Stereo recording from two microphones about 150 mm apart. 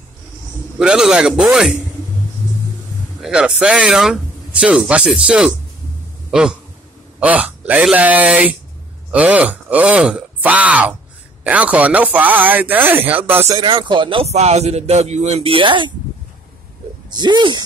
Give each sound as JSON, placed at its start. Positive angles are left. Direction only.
{"t": 0.7, "sound": "a man's voice", "side_deg": -5}
{"t": 3.2, "sound": "speech", "side_deg": -5}
{"t": 7.2, "sound": "speech", "side_deg": -10}
{"t": 13.6, "sound": "a man's voice", "side_deg": -35}
{"t": 17.1, "sound": "speech", "side_deg": -30}